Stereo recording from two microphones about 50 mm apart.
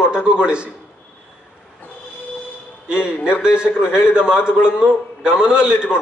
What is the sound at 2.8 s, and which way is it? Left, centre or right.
A man's voice, centre.